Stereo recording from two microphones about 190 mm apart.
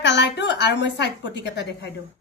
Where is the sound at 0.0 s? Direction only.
65° left (ahead or behind).